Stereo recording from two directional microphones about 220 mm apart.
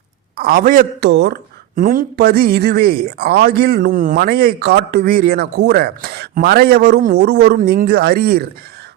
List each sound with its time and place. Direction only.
0.3 s a man's voice: 40° right (ahead or behind)
1.1 s speech: 50° right (ahead or behind)
1.7 s speech: 40° right (ahead or behind)